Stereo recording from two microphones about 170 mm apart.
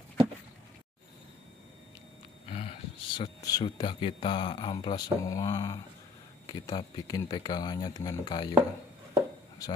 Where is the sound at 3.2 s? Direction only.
25° left (ahead or behind).